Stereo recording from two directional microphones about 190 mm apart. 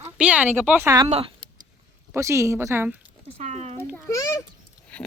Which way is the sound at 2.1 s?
15° right (ahead or behind).